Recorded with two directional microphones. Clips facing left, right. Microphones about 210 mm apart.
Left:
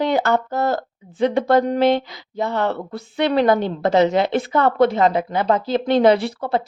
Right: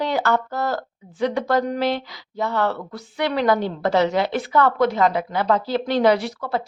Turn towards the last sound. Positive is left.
turn(degrees=25)  # may be behind; listen again after turning